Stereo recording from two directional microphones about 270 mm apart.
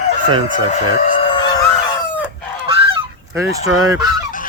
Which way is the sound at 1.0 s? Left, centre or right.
Centre.